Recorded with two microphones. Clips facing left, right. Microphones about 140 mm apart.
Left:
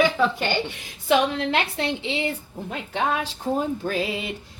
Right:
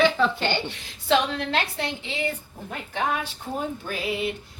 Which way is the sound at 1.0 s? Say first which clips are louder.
Left 2 dB; 15° left (ahead or behind).